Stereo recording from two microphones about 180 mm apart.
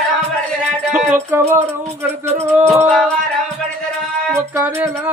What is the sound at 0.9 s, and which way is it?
Music, 15° right (ahead or behind).